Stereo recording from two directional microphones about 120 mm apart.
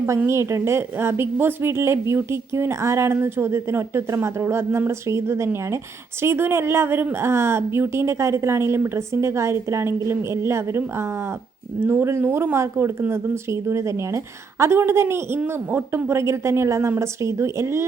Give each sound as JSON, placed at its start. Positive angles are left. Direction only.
{"t": 0.0, "sound": "a woman's voice", "side_deg": -20}